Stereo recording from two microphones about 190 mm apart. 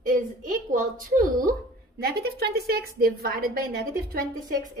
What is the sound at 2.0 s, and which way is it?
A woman's voice, 55° right (ahead or behind).